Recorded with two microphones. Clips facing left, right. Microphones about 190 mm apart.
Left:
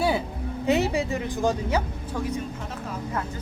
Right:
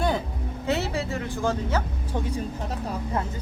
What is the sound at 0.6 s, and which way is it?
Speech, 15° left (ahead or behind).